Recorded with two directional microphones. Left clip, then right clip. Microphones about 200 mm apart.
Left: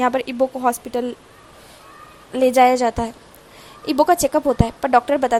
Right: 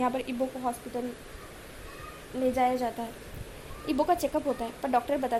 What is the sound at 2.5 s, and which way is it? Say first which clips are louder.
A woman's voice: left 14 dB; 40° left (ahead or behind).